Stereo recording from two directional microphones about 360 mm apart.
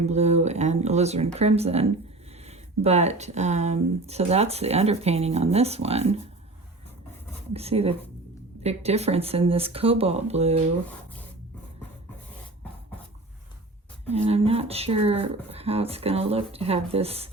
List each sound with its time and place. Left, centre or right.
0.0 s speech: centre
7.5 s speech: centre
14.1 s speech: centre